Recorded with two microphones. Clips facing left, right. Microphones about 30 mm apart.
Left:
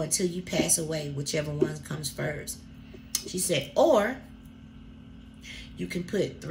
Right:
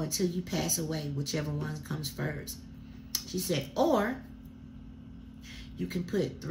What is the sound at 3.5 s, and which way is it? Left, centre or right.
Speech, left.